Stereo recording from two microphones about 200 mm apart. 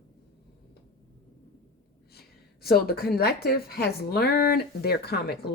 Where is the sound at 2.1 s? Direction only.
50° left (ahead or behind).